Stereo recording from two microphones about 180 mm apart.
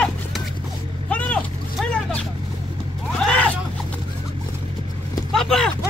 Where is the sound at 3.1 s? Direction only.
5° left (ahead or behind).